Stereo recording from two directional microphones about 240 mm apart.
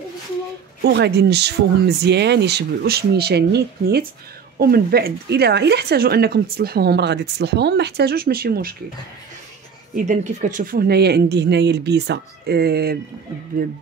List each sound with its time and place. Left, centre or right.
0.8 s speech: right
10.0 s speech: right